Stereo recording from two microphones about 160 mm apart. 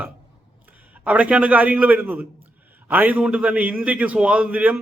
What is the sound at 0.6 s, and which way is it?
A man's voice, 10° right (ahead or behind).